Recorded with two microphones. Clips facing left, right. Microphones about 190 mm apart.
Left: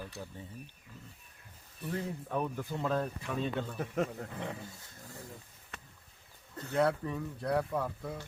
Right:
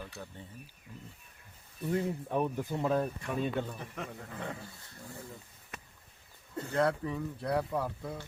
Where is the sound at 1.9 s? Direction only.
15° right (ahead or behind).